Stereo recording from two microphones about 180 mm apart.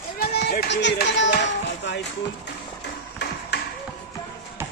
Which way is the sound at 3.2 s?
75° left (ahead or behind).